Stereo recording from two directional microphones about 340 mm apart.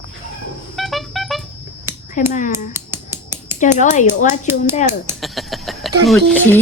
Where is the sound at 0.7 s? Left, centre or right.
Centre.